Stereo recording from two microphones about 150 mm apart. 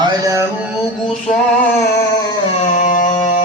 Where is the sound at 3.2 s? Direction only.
50° left (ahead or behind).